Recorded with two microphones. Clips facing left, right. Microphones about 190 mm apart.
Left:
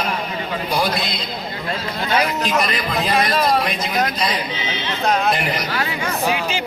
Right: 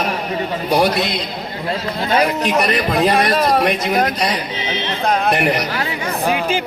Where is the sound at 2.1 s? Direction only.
35° right (ahead or behind).